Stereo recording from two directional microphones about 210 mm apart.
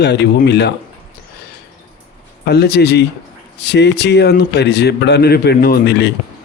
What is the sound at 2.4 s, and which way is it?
A man's voice, 50° left (ahead or behind).